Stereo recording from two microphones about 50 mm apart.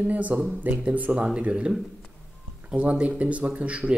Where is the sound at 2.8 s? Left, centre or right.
Right.